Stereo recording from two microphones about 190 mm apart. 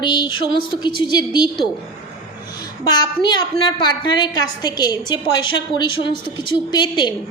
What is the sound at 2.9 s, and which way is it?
A woman's voice, 25° left (ahead or behind).